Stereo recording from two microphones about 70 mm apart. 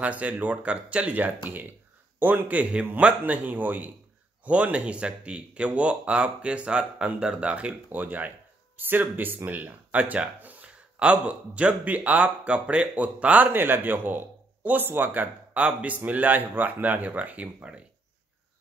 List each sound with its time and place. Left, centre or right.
0.0 s speech: right